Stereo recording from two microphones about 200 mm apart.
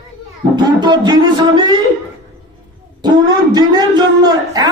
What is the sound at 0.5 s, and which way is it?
Music, 20° right (ahead or behind).